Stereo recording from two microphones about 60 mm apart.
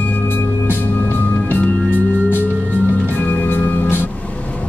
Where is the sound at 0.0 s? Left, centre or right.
Left.